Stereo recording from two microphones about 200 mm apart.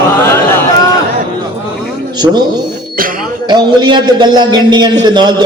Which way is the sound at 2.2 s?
20° right (ahead or behind).